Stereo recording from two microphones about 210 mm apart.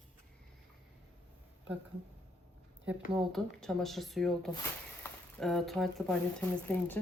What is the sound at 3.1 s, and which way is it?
A woman's voice, centre (ahead or behind).